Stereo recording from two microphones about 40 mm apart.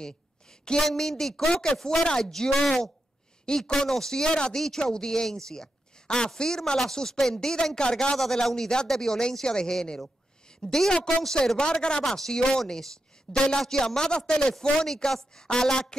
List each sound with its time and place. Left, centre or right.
0.8 s speech: centre
1.5 s speech: left
1.8 s speech: centre